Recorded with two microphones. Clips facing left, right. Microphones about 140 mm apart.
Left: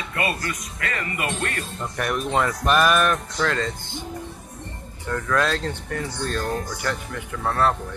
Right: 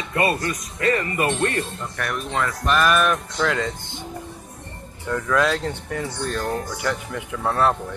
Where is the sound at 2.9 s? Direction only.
5° right (ahead or behind).